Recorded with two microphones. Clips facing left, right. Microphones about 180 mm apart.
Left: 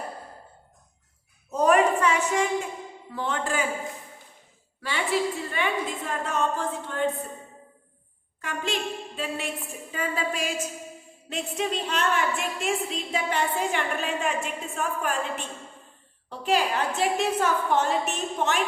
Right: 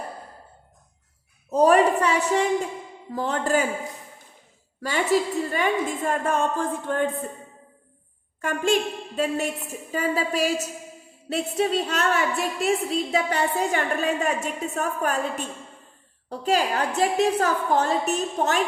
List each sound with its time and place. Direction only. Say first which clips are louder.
1.5 s a sound: right 3 dB; 35° right (ahead or behind)
3.1 s a woman's voice: right 5 dB; 40° right (ahead or behind)
4.8 s a woman's voice: right 4 dB; 45° right (ahead or behind)
8.4 s a woman's voice: right 8 dB; 50° right (ahead or behind)